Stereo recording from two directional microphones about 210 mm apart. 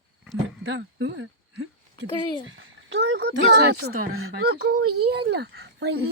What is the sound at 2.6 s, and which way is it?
Speech, 65° right (ahead or behind).